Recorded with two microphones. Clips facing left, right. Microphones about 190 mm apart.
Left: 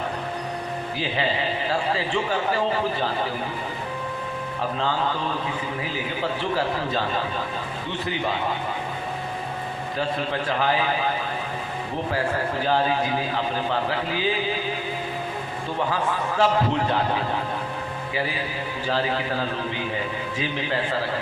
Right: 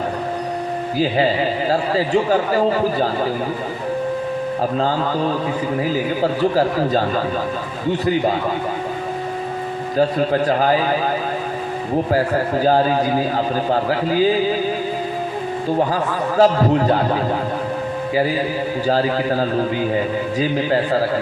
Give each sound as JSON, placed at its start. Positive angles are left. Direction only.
{"t": 0.9, "sound": "a man's voice", "side_deg": -40}
{"t": 4.8, "sound": "a man's voice", "side_deg": -40}
{"t": 10.0, "sound": "a man's voice", "side_deg": -40}
{"t": 12.1, "sound": "a man's voice", "side_deg": -40}
{"t": 16.4, "sound": "a man's voice", "side_deg": -40}